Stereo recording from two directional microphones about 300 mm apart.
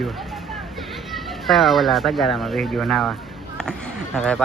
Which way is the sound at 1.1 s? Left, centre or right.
Centre.